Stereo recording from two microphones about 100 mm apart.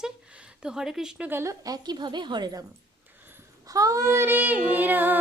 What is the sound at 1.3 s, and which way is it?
Female singing, 25° right (ahead or behind).